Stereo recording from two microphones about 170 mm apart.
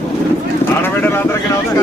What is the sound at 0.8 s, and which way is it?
Vehicle, 15° left (ahead or behind).